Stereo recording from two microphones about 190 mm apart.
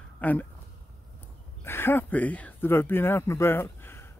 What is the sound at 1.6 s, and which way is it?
Speech, 10° left (ahead or behind).